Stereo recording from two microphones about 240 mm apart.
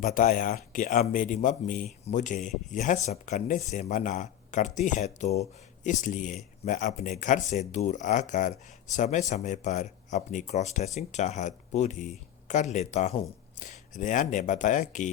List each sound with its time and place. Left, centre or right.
0.0 s speech: left